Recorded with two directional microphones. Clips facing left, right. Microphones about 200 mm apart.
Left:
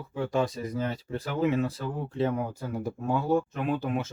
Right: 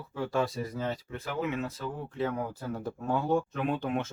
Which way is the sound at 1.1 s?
35° left (ahead or behind).